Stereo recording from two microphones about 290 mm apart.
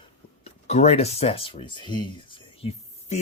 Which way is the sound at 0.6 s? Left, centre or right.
Left.